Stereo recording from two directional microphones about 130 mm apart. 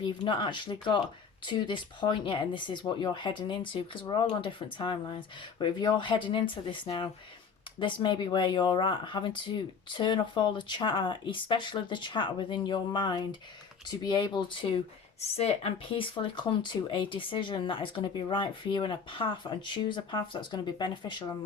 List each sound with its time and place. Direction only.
0.0 s speech: 35° left (ahead or behind)
15.2 s speech: 50° left (ahead or behind)